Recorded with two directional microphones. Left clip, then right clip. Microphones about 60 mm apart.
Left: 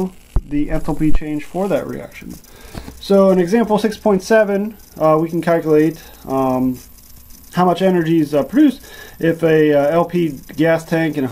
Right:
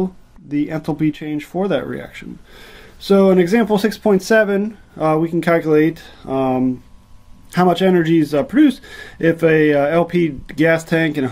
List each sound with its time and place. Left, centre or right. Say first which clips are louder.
0.0 s speech: right 1 dB; centre